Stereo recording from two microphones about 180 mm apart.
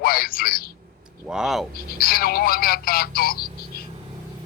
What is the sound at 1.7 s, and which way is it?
Speech, 55° left (ahead or behind).